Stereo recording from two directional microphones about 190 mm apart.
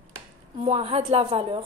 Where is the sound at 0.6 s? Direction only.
30° right (ahead or behind).